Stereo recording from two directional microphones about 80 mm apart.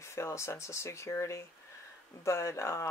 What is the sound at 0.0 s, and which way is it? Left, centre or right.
Speech, left.